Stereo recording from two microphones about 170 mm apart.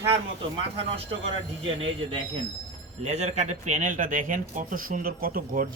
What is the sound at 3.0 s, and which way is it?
Speech, 40° right (ahead or behind).